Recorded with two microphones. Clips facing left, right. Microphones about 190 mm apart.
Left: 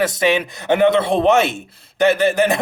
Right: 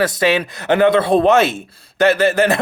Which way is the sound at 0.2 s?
20° left (ahead or behind).